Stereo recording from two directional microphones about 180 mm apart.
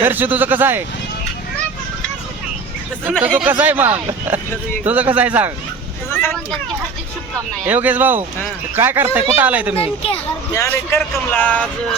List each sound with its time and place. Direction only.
0.0 s speech: 10° right (ahead or behind)
3.0 s speech: centre (ahead or behind)
6.1 s vehicle: 10° left (ahead or behind)
7.6 s speech: 10° right (ahead or behind)
9.7 s speech: 30° left (ahead or behind)
10.5 s speech: 15° left (ahead or behind)